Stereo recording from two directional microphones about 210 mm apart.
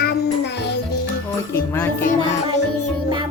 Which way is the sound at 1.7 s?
10° left (ahead or behind).